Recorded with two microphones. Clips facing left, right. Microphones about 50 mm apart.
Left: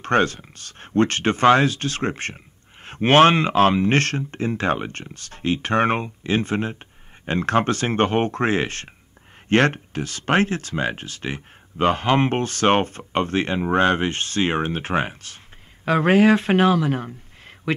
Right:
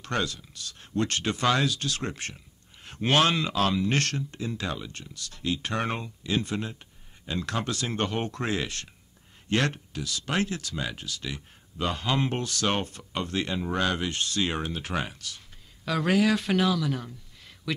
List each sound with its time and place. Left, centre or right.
0.0 s speech: left